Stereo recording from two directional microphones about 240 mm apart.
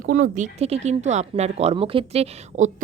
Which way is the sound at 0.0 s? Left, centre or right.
Right.